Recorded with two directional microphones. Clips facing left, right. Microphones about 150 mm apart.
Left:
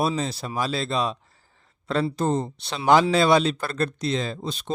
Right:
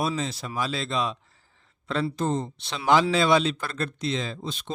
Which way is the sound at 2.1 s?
40° left (ahead or behind).